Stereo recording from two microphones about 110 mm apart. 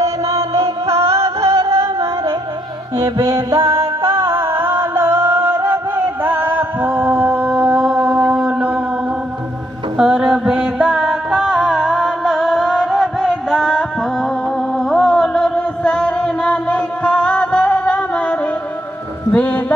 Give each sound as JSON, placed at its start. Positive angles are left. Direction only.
{"t": 0.5, "sound": "music", "side_deg": -25}
{"t": 7.2, "sound": "a sound", "side_deg": -5}
{"t": 7.8, "sound": "mantra", "side_deg": 0}
{"t": 9.9, "sound": "music", "side_deg": -5}